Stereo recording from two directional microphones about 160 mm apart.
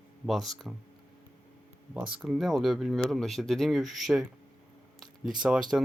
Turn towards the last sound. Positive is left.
turn(degrees=-5)  # may be behind; listen again after turning